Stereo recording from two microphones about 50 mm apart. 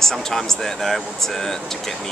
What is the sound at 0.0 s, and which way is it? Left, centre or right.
Speech, centre.